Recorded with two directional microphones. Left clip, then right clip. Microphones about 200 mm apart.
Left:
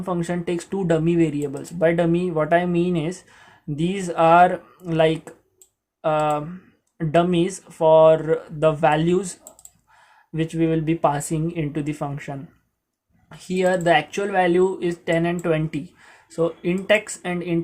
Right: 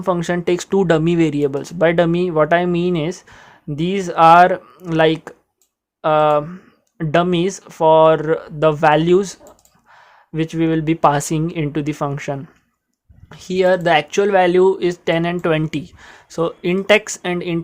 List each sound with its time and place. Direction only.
0.0 s speech: 40° right (ahead or behind)